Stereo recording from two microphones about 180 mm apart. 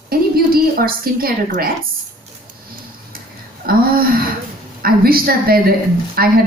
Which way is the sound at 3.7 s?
55° right (ahead or behind).